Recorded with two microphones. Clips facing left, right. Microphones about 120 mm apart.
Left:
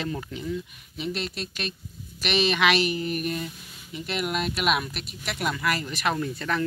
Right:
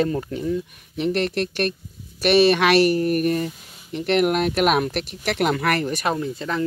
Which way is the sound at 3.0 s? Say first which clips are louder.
Right 8 dB; 55° right (ahead or behind).